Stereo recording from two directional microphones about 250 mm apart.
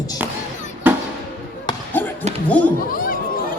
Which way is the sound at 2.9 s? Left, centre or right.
Left.